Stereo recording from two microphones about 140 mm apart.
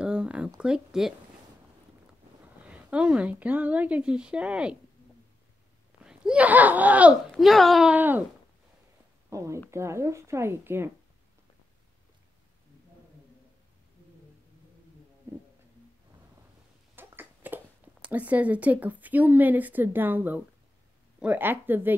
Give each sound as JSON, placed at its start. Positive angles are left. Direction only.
{"t": 0.0, "sound": "a sound", "side_deg": -5}
{"t": 0.6, "sound": "speech", "side_deg": -5}
{"t": 2.6, "sound": "speech", "side_deg": -10}
{"t": 6.0, "sound": "speech", "side_deg": -5}
{"t": 7.9, "sound": "speech", "side_deg": -15}
{"t": 9.3, "sound": "speech", "side_deg": -20}
{"t": 16.9, "sound": "a sound", "side_deg": -15}
{"t": 18.0, "sound": "speech", "side_deg": -10}